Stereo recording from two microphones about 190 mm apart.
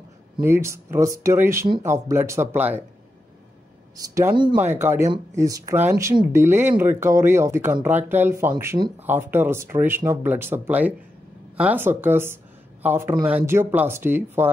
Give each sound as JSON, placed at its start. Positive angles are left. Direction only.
{"t": 0.4, "sound": "speech", "side_deg": -15}
{"t": 4.0, "sound": "speech", "side_deg": -15}